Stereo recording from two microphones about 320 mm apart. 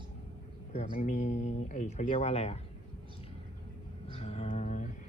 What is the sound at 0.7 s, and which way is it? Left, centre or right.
Speech, left.